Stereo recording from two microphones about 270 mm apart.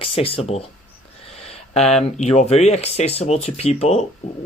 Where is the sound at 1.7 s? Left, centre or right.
Left.